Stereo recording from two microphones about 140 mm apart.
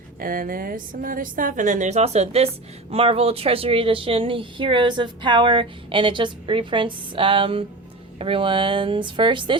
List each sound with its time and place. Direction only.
0.2 s a woman's voice: 90° right; by 9.6 s 35° right (ahead or behind)